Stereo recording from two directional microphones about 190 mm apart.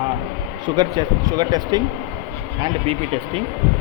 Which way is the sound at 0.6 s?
20° right (ahead or behind).